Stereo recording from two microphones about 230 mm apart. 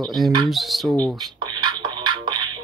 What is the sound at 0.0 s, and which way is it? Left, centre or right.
Speech, centre.